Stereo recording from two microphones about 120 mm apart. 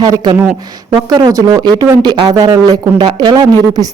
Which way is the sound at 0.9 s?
35° right (ahead or behind).